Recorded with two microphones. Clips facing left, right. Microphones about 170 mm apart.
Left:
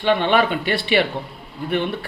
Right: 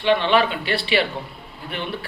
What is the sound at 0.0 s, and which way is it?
A man's voice, 50° left (ahead or behind).